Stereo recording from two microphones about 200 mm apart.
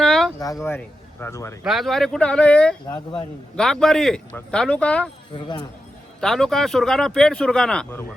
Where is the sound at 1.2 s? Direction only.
15° left (ahead or behind).